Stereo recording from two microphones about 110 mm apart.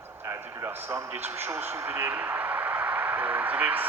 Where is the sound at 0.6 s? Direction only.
20° right (ahead or behind).